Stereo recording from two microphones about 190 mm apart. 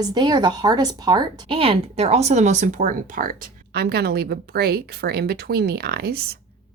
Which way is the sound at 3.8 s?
55° right (ahead or behind).